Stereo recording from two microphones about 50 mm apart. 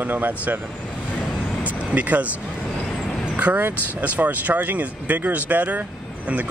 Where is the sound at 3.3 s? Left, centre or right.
Right.